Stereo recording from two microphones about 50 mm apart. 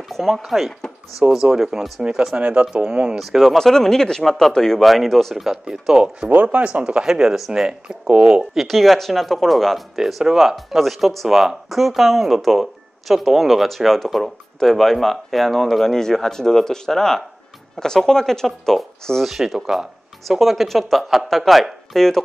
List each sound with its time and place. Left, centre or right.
0.1 s speech: centre
2.3 s speech: right
3.2 s speech: centre
6.2 s speech: right; by 7.6 s centre
7.6 s speech: right
8.5 s speech: centre
19.2 s speech: centre